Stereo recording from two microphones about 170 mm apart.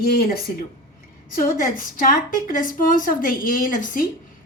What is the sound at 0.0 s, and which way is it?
A woman's voice, 60° left (ahead or behind).